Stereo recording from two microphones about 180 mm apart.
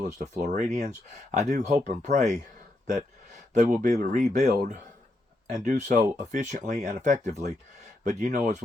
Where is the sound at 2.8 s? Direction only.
45° right (ahead or behind).